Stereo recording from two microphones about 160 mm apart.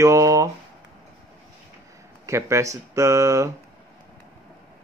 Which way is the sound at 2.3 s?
20° right (ahead or behind).